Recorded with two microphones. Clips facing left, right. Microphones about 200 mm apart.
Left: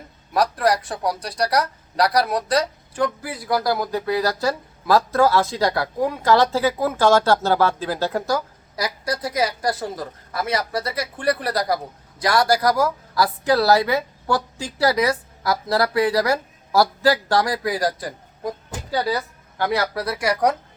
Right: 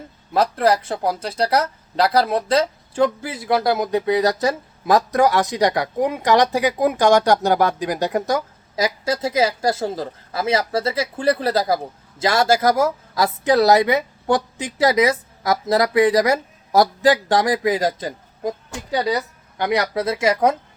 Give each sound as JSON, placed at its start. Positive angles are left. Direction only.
{"t": 0.3, "sound": "speech", "side_deg": -25}